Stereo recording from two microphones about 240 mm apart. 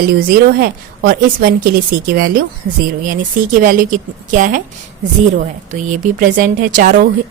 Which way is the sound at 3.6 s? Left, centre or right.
Right.